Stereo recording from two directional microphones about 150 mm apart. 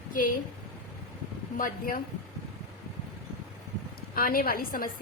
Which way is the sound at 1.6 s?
75° left (ahead or behind).